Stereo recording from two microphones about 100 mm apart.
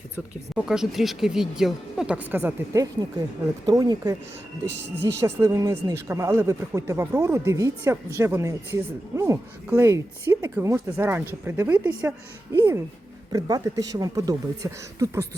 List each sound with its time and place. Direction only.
0.5 s speech: 5° right (ahead or behind)
2.7 s speech: 35° right (ahead or behind)
5.2 s speech: 35° right (ahead or behind)
13.3 s speech: 40° right (ahead or behind)